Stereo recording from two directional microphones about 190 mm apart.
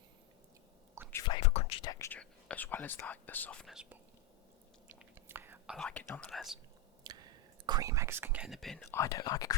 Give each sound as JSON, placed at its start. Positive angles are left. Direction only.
{"t": 1.0, "sound": "whispering", "side_deg": -15}
{"t": 1.4, "sound": "whispering", "side_deg": 35}
{"t": 1.9, "sound": "whispering", "side_deg": 15}
{"t": 5.7, "sound": "speech", "side_deg": 5}
{"t": 7.1, "sound": "a sound", "side_deg": -20}
{"t": 7.7, "sound": "speech", "side_deg": -15}
{"t": 8.9, "sound": "speech", "side_deg": 15}